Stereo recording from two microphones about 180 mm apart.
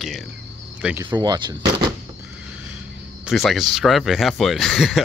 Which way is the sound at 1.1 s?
25° right (ahead or behind).